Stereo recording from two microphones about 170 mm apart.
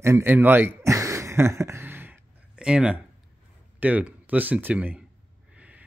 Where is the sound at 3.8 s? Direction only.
10° right (ahead or behind).